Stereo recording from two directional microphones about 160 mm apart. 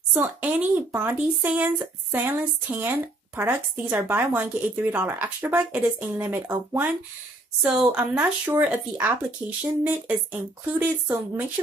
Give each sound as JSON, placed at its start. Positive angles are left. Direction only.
{"t": 0.1, "sound": "a woman's voice", "side_deg": -10}